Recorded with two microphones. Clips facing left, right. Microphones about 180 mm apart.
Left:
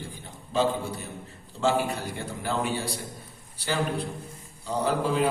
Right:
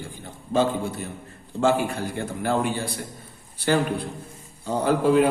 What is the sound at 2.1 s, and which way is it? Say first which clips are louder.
Speech: right 8 dB; 55° right (ahead or behind).